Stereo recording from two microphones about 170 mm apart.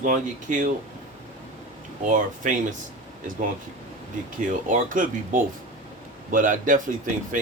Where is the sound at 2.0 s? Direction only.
50° right (ahead or behind).